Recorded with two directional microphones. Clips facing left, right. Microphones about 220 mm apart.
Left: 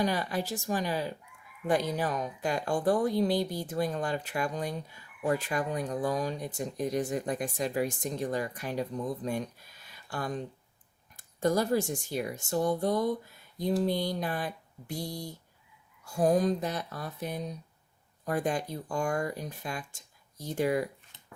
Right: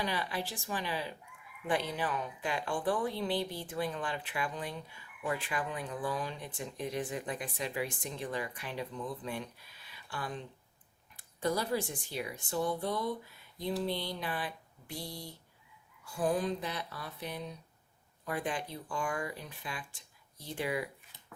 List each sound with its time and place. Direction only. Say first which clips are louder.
0.0 s speech: left 6 dB; 45° left (ahead or behind)